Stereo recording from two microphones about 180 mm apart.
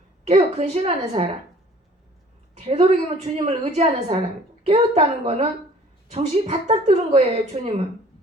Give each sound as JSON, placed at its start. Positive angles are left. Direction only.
{"t": 0.3, "sound": "speech", "side_deg": -35}
{"t": 2.6, "sound": "a woman's voice", "side_deg": -30}